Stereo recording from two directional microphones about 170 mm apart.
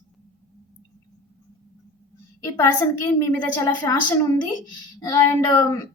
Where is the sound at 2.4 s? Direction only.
15° left (ahead or behind).